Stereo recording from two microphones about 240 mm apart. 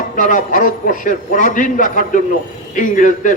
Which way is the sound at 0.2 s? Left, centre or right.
Left.